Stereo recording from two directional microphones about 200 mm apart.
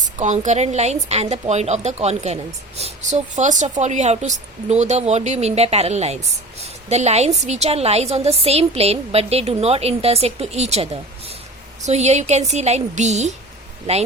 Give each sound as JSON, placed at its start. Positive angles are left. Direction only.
{"t": 0.0, "sound": "a woman's voice", "side_deg": -35}